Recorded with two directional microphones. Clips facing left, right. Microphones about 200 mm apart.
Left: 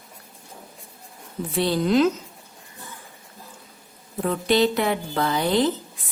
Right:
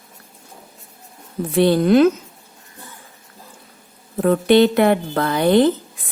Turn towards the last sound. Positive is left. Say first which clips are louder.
# right 6 dB
turn(degrees=-60)  # may be behind; listen again after turning